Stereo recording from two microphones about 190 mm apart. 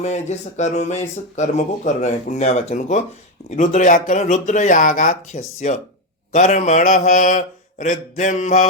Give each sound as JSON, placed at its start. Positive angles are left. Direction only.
{"t": 0.0, "sound": "speech", "side_deg": 35}